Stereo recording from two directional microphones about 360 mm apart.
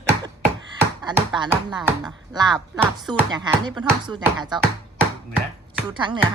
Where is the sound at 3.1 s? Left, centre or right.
Centre.